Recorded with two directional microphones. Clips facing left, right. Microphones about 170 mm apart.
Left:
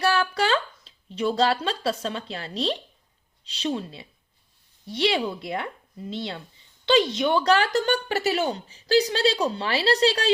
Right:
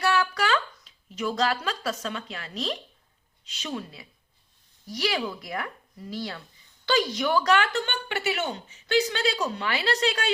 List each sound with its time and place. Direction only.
0.0 s a woman's voice: 30° left (ahead or behind)